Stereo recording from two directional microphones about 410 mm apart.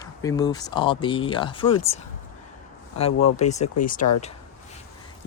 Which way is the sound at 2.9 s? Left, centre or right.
Centre.